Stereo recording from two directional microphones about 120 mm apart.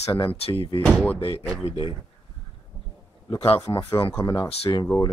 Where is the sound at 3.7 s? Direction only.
35° left (ahead or behind).